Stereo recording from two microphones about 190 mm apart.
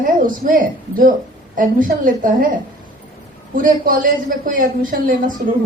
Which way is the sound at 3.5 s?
45° right (ahead or behind).